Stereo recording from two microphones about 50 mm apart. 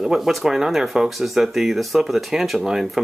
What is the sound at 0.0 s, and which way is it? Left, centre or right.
Speech, centre.